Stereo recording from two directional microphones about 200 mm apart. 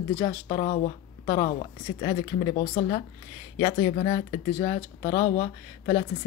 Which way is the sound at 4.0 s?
35° left (ahead or behind).